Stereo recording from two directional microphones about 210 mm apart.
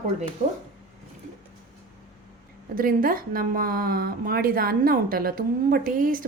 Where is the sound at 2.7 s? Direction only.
45° right (ahead or behind).